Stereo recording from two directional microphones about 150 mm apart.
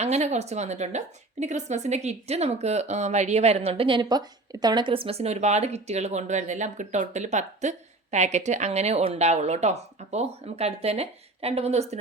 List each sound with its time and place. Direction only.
0.0 s a woman's voice: 45° right (ahead or behind)